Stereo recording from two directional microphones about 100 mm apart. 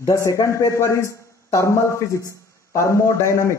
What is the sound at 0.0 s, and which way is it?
A man's voice, 30° left (ahead or behind).